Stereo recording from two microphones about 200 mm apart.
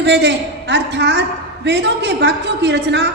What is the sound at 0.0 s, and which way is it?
A woman's voice, 60° right (ahead or behind).